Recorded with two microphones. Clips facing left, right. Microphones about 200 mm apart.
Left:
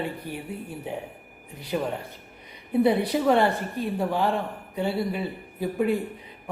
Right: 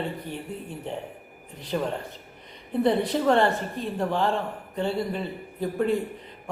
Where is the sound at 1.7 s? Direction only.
5° left (ahead or behind).